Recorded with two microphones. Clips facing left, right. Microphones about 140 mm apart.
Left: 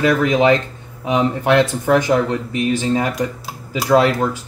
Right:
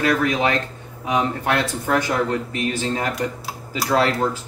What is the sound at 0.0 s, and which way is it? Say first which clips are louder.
Speech: left 5 dB; 20° left (ahead or behind).